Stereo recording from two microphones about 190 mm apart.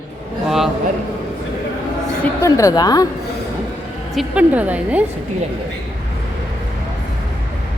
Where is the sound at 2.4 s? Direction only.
15° left (ahead or behind).